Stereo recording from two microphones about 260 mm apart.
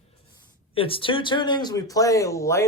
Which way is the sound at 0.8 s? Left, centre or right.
Left.